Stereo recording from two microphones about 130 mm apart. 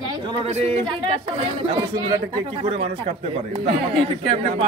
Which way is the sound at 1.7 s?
35° right (ahead or behind).